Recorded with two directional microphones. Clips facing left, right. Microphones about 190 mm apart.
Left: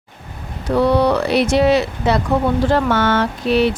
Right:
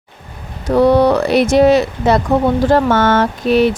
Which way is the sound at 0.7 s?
45° right (ahead or behind).